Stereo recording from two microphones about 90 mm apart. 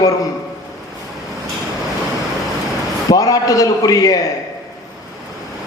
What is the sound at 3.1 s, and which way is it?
A man's voice, 40° left (ahead or behind).